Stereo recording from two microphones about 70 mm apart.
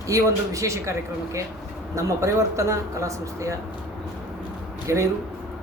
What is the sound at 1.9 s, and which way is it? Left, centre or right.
Speech, right.